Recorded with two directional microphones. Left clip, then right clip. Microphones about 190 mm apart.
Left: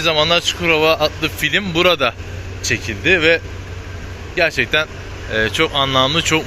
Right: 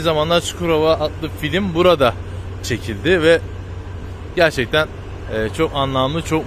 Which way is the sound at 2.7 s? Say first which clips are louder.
Left 2 dB; 25° right (ahead or behind).